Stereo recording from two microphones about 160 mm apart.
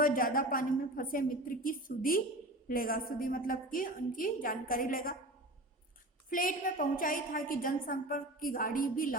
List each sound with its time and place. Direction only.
0.0 s a woman's voice: 60° left (ahead or behind)
6.3 s a woman's voice: 60° left (ahead or behind)